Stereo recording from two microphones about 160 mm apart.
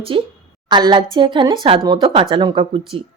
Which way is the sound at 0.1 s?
35° right (ahead or behind).